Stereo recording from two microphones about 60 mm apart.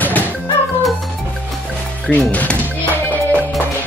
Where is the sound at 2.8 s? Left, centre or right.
Left.